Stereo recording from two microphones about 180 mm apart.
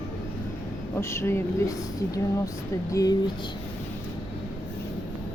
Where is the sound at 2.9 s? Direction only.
20° left (ahead or behind).